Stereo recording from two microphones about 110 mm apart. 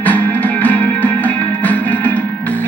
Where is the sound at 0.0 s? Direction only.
15° left (ahead or behind).